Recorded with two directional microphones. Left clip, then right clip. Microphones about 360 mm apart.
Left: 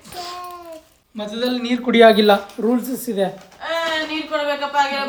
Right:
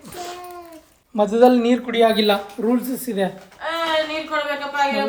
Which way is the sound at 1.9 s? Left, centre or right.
Centre.